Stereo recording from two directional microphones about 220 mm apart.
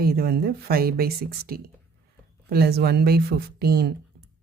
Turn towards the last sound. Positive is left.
turn(degrees=-45)  # may be behind; listen again after turning